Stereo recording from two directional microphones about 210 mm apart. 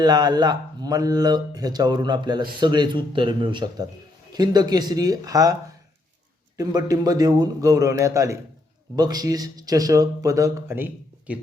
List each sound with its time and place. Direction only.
0.0 s speech: 20° right (ahead or behind)
6.6 s speech: 15° right (ahead or behind)